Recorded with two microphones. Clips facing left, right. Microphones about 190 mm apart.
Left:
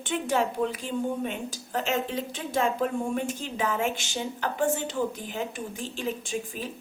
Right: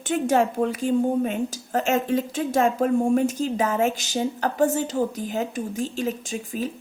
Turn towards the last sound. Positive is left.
turn(degrees=-40)  # may be behind; listen again after turning